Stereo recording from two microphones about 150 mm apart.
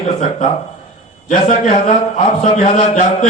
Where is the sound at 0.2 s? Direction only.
55° left (ahead or behind).